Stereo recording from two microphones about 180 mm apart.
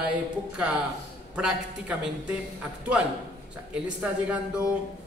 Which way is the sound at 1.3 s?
5° right (ahead or behind).